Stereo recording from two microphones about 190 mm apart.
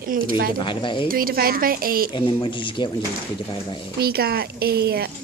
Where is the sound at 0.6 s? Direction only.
25° left (ahead or behind).